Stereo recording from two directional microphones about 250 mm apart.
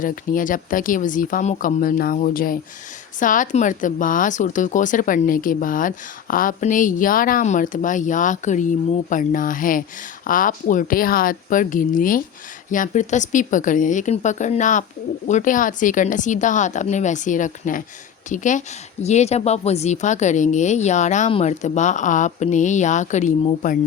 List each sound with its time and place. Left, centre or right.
0.0 s a woman's voice: left